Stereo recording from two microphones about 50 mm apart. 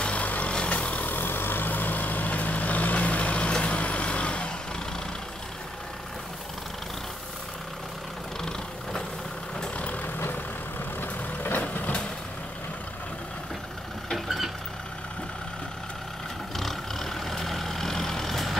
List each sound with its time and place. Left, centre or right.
0.0 s vehicle: left
8.4 s vehicle: centre
9.8 s vehicle: left
10.1 s vehicle: left
11.6 s vehicle: left
14.1 s vehicle: centre
16.5 s vehicle: centre